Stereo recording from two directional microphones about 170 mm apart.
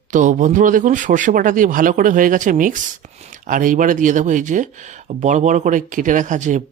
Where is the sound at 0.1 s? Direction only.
45° right (ahead or behind).